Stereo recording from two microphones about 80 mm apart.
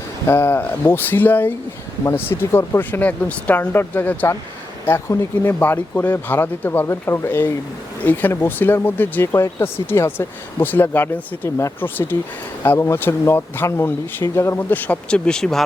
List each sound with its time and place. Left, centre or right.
0.3 s speech: left
3.0 s speech: centre
4.9 s speech: left
5.4 s speech: left
14.8 s speech: centre